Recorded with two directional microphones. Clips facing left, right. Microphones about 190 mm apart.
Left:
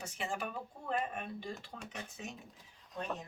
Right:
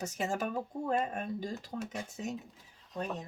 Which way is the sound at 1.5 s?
5° right (ahead or behind).